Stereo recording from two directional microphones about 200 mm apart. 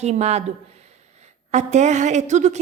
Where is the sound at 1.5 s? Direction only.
35° right (ahead or behind).